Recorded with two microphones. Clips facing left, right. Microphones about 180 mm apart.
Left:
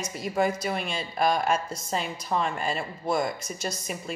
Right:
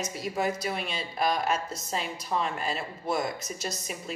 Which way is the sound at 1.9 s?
Centre (ahead or behind).